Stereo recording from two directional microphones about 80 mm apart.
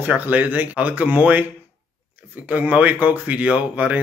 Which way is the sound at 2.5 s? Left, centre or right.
Centre.